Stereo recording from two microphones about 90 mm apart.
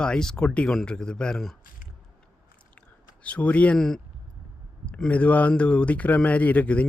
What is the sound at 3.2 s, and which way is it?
Speech, 15° left (ahead or behind).